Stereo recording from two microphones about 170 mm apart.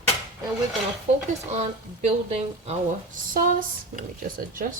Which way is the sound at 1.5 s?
40° right (ahead or behind).